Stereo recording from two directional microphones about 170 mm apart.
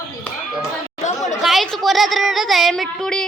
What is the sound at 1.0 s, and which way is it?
Chatter, 45° left (ahead or behind).